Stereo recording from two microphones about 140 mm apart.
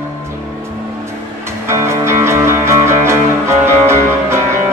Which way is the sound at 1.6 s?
20° right (ahead or behind).